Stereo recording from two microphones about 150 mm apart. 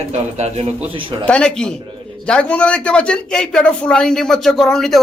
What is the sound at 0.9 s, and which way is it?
Speech, 35° right (ahead or behind).